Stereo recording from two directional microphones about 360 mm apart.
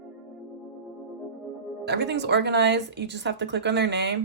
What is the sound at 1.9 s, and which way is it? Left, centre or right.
Speech, right.